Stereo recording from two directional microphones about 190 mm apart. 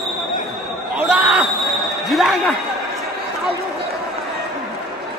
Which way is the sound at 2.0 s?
Centre (ahead or behind).